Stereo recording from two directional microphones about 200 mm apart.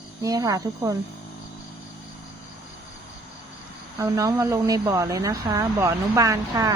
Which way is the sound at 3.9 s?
15° right (ahead or behind).